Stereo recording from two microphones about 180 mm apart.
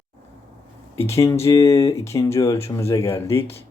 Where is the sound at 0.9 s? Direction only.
15° left (ahead or behind).